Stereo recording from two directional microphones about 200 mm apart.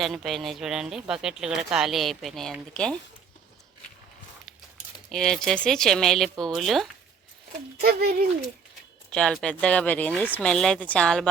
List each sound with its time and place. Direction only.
0.0 s speech: centre (ahead or behind)
5.1 s speech: centre (ahead or behind)
7.8 s speech: 50° right (ahead or behind)
9.0 s speech: 5° left (ahead or behind)